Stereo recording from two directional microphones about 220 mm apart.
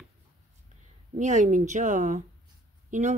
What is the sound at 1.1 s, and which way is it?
Speech, 35° right (ahead or behind).